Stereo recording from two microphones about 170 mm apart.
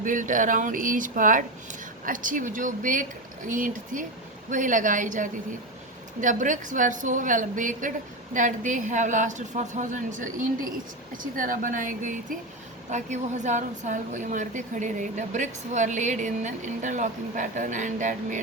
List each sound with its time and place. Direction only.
0.0 s a woman's voice: 50° right (ahead or behind)